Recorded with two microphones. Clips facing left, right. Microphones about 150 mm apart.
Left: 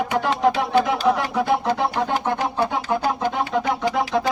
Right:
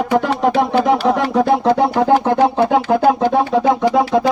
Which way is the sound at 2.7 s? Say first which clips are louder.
Right 9 dB; 70° right (ahead or behind).